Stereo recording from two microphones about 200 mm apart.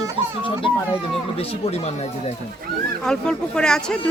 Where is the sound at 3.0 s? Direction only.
5° left (ahead or behind).